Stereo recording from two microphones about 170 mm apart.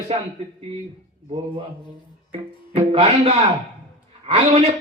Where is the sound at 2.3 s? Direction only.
30° right (ahead or behind).